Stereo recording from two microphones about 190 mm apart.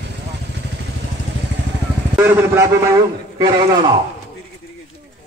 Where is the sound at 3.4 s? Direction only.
25° right (ahead or behind).